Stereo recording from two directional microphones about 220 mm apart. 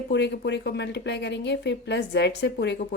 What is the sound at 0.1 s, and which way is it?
Speech, 50° left (ahead or behind).